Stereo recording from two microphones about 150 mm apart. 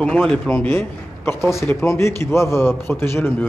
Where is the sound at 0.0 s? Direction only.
5° left (ahead or behind).